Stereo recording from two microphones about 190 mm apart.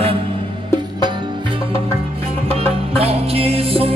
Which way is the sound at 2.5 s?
30° right (ahead or behind).